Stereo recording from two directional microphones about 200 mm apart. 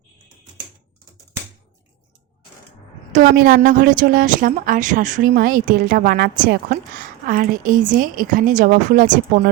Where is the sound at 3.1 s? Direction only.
45° right (ahead or behind).